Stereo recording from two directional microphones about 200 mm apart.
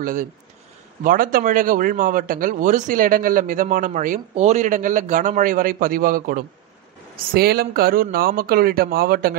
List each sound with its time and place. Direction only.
0.0 s speech: 40° right (ahead or behind)